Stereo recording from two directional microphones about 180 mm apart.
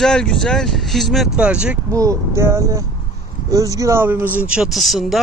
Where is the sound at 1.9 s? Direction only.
15° right (ahead or behind); by 5.2 s centre (ahead or behind).